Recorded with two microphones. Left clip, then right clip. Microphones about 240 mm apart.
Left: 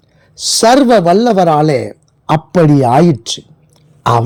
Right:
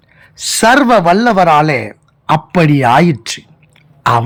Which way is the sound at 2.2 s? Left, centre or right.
Centre.